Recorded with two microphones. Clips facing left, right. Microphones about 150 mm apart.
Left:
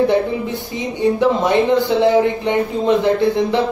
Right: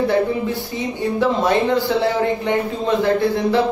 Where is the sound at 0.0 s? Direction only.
20° left (ahead or behind).